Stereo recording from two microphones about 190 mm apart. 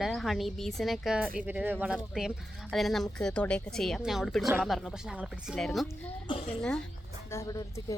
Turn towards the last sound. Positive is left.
turn(degrees=5)  # may be behind; listen again after turning